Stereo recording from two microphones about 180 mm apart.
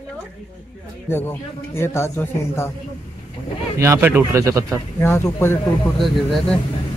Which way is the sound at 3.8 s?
15° right (ahead or behind).